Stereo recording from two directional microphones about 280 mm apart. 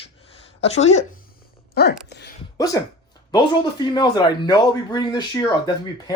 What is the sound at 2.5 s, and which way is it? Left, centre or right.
Speech, centre.